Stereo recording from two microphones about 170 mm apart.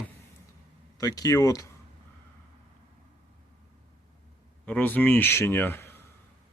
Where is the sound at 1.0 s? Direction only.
20° left (ahead or behind).